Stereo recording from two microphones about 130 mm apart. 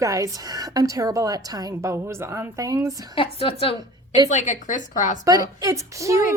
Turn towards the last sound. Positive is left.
turn(degrees=-25)  # may be behind; listen again after turning